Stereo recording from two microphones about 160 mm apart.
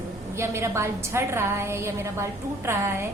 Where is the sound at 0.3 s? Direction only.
15° right (ahead or behind).